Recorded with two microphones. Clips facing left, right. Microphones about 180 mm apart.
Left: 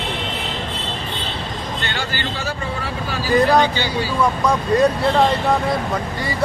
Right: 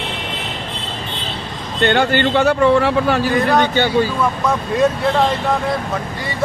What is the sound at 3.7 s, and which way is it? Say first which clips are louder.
Speech: right 7 dB; 55° right (ahead or behind).